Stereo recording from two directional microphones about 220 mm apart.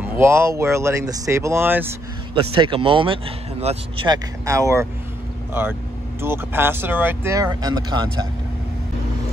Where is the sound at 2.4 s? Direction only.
25° right (ahead or behind).